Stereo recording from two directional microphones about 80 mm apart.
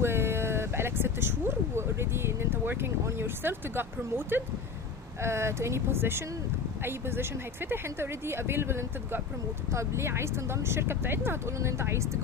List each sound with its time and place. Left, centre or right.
0.0 s speech: right